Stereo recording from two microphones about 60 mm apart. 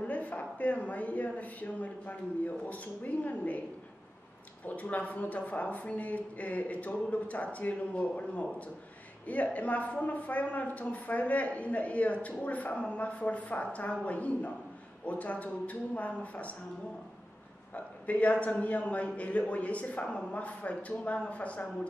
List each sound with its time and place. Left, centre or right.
0.0 s a man's voice: left
4.6 s a man's voice: left
17.7 s a man's voice: left